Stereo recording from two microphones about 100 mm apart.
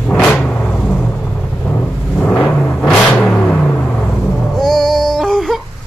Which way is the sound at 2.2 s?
10° left (ahead or behind).